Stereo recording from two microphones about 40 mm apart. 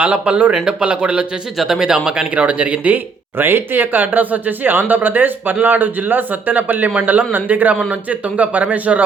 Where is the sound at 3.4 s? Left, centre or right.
Right.